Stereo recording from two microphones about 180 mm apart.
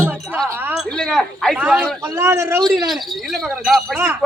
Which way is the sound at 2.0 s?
15° right (ahead or behind).